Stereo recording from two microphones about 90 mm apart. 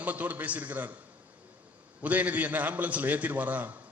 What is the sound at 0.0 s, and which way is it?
Speech, 20° right (ahead or behind).